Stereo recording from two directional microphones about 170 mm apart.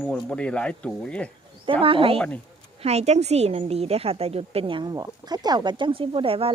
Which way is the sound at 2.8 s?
40° right (ahead or behind).